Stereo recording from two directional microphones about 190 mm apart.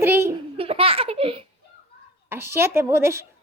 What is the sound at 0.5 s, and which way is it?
Speech, 30° right (ahead or behind).